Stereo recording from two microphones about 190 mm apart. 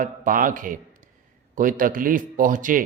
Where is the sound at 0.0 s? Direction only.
45° right (ahead or behind).